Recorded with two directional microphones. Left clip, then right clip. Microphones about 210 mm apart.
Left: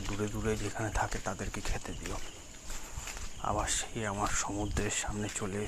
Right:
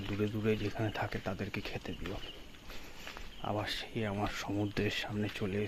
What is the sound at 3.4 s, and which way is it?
Speech, 20° right (ahead or behind).